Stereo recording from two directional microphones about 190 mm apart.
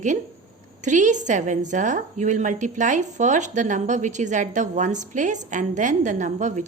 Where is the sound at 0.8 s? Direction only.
40° right (ahead or behind).